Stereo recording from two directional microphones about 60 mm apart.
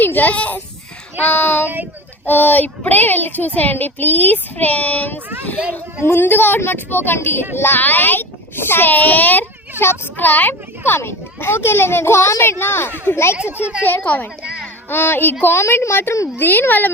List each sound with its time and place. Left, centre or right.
0.0 s a child's voice: left
15.6 s a woman's voice: left
16.4 s a child's voice: left